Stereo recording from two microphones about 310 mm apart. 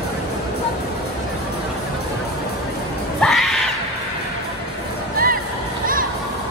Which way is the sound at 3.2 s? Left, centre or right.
Centre.